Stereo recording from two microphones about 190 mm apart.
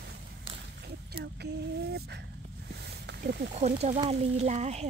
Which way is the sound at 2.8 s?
60° right (ahead or behind).